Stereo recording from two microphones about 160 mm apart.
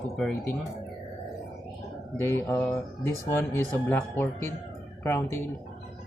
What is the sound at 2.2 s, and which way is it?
Speech, 15° left (ahead or behind).